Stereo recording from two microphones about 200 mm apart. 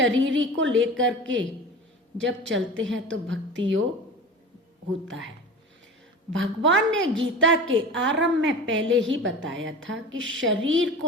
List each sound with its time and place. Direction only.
0.0 s a woman's voice: 70° right (ahead or behind)
5.0 s a woman's voice: 70° right (ahead or behind)
6.3 s a woman's voice: 70° right (ahead or behind)